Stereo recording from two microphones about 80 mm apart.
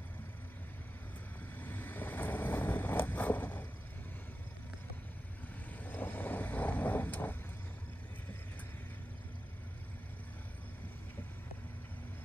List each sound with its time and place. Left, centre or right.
1.6 s vehicle: left
5.7 s vehicle: left